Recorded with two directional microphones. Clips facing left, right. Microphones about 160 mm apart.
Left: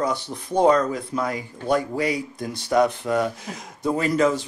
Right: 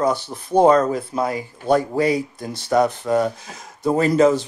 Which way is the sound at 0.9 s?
30° right (ahead or behind).